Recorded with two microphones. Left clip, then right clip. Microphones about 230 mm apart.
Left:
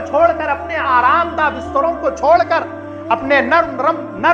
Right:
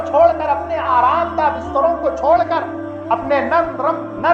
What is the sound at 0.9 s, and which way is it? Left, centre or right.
Speech, left.